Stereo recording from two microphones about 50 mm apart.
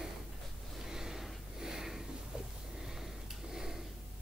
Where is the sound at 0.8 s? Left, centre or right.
Centre.